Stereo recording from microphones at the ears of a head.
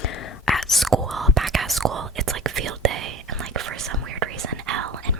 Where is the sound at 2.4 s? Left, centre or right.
Right.